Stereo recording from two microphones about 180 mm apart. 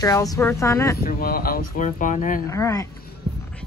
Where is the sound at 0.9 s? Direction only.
55° left (ahead or behind).